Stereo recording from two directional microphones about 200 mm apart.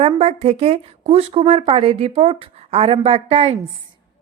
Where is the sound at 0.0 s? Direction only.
30° right (ahead or behind).